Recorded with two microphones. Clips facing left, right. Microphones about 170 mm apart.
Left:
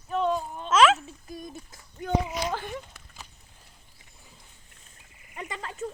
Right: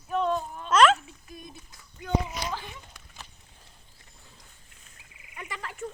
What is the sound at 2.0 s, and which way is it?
Speech, 50° left (ahead or behind).